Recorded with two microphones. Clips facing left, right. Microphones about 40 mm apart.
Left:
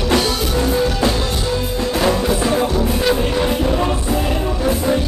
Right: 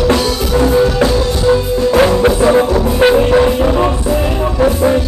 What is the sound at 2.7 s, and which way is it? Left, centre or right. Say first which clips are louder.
Music: right 7 dB; right.